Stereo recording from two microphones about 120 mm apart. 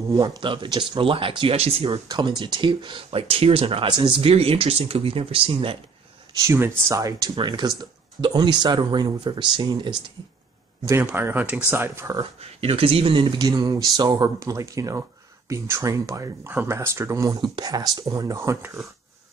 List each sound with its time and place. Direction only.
0.1 s speech: 35° right (ahead or behind); by 2.0 s 50° right (ahead or behind)
2.0 s speech: 40° right (ahead or behind)
6.4 s speech: 20° right (ahead or behind); by 9.9 s 40° right (ahead or behind)
11.0 s speech: 15° right (ahead or behind)
12.4 s speech: 55° right (ahead or behind); by 17.4 s 25° right (ahead or behind)
17.4 s speech: 35° right (ahead or behind)